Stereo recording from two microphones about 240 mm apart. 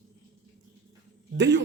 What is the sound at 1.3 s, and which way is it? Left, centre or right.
Speech, right.